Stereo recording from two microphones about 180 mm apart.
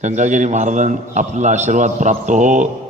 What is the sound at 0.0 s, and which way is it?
A man's voice, 40° right (ahead or behind).